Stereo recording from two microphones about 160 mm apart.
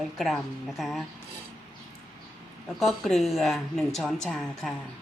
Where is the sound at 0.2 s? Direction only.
Centre (ahead or behind).